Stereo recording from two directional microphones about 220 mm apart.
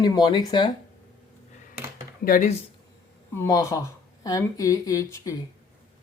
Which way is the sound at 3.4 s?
15° left (ahead or behind).